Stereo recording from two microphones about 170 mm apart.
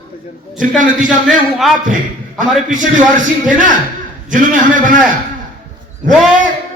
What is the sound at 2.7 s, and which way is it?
Music, 50° right (ahead or behind).